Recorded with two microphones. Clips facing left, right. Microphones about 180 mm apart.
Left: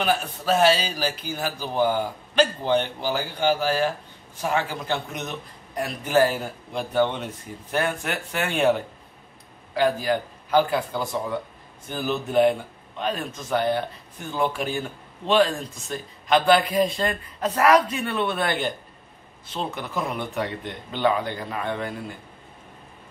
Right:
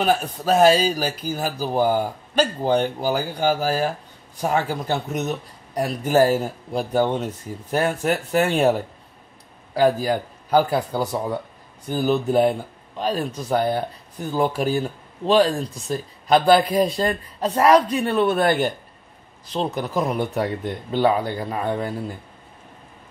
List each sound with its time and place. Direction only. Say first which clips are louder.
0.0 s speech: right 3 dB; 40° right (ahead or behind)